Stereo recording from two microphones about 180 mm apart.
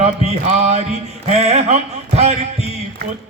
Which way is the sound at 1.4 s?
35° right (ahead or behind).